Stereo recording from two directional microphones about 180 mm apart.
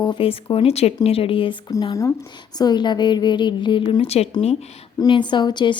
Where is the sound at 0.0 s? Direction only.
30° left (ahead or behind).